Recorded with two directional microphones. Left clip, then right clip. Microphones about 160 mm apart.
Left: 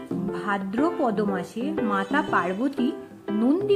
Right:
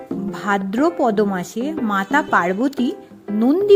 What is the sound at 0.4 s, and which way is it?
A woman's voice, 50° right (ahead or behind).